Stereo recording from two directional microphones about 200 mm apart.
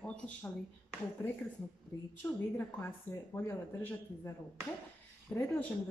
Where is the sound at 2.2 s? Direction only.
10° left (ahead or behind).